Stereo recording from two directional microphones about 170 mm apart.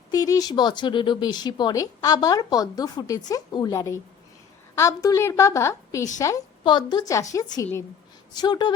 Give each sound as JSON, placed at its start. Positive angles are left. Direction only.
{"t": 0.1, "sound": "a woman's voice", "side_deg": 20}